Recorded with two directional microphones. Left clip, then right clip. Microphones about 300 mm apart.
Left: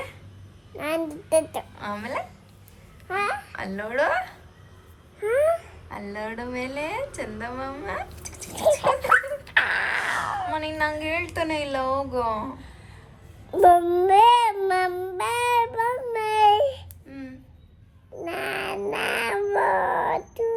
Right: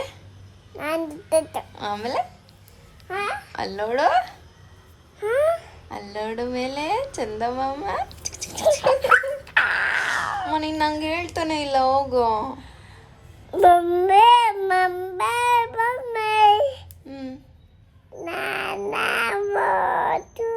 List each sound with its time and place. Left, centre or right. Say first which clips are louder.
0.8 s a child's voice: right 1 dB; centre
3.1 s babbling: left 1 dB; centre
5.2 s a sound: right 1 dB; centre
6.1 s a woman's voice: right 5 dB; centre
13.5 s child singing: right 1 dB; centre
18.2 s dog: right 2 dB; centre